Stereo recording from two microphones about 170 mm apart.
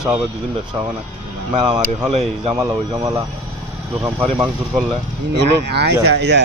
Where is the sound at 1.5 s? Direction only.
25° right (ahead or behind).